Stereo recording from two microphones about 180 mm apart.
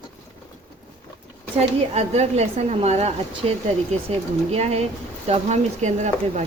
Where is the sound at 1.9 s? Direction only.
35° right (ahead or behind).